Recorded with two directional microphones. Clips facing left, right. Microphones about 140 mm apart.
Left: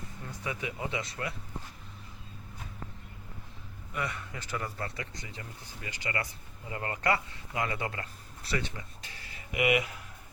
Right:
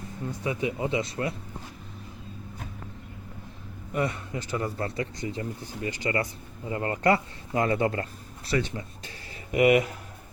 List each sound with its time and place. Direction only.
0.4 s speech: 25° right (ahead or behind)
3.9 s speech: 30° right (ahead or behind)
8.4 s a sound: 30° right (ahead or behind)